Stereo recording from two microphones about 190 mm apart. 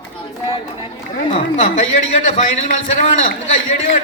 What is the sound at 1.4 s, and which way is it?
A man's voice, 45° left (ahead or behind).